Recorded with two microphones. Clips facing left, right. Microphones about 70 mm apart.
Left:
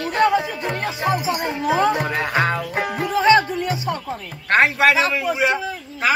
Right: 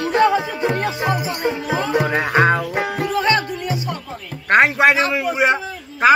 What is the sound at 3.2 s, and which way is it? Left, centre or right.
Music, centre.